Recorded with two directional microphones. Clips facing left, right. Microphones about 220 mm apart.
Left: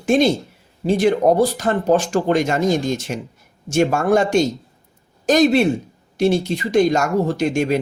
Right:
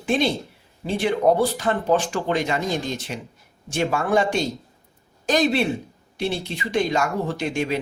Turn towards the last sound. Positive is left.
turn(degrees=45)  # may be behind; listen again after turning